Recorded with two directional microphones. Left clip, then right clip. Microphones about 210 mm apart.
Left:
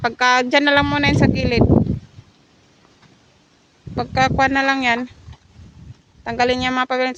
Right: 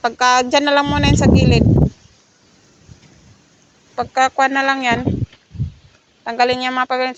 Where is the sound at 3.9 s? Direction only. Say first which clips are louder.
Right 2 dB; 20° left (ahead or behind).